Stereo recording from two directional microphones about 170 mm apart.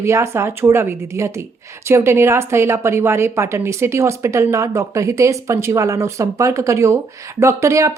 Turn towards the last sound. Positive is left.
turn(degrees=-15)  # may be behind; listen again after turning